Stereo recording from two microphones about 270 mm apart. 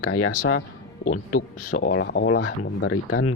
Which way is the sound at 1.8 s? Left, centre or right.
Left.